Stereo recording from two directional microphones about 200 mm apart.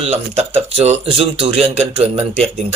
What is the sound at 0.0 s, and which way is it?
Speech, 30° right (ahead or behind).